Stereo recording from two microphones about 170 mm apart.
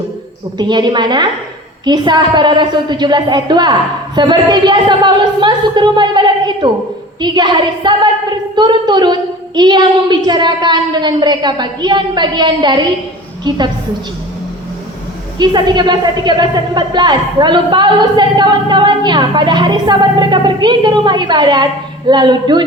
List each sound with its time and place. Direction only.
0.6 s a woman's voice: 25° right (ahead or behind)
15.4 s a woman's voice: 25° right (ahead or behind)